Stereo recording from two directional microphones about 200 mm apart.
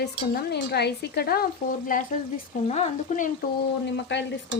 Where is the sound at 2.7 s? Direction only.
35° left (ahead or behind).